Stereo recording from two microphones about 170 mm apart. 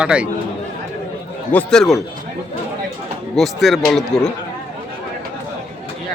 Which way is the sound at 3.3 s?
Centre (ahead or behind).